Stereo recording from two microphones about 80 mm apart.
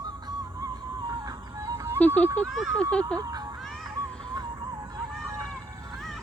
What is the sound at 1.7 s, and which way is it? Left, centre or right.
Music, right.